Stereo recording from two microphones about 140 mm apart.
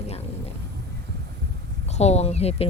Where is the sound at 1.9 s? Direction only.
50° left (ahead or behind).